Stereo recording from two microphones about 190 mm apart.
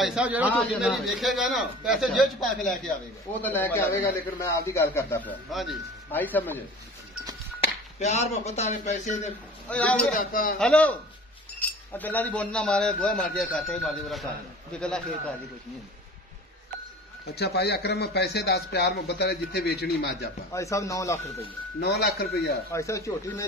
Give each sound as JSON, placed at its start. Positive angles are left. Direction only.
{"t": 0.0, "sound": "a man's voice", "side_deg": -5}
{"t": 5.5, "sound": "a man's voice", "side_deg": 0}
{"t": 6.1, "sound": "a man's voice", "side_deg": 10}
{"t": 8.0, "sound": "speech", "side_deg": 35}
{"t": 9.7, "sound": "a man's voice", "side_deg": 5}
{"t": 10.1, "sound": "a man's voice", "side_deg": 50}
{"t": 10.6, "sound": "a man's voice", "side_deg": 5}
{"t": 17.4, "sound": "a man's voice", "side_deg": 60}
{"t": 20.5, "sound": "a man's voice", "side_deg": 15}
{"t": 21.7, "sound": "a man's voice", "side_deg": 60}
{"t": 22.7, "sound": "a man's voice", "side_deg": 15}